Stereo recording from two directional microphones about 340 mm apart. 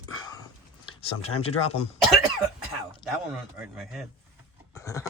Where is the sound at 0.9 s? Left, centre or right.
Centre.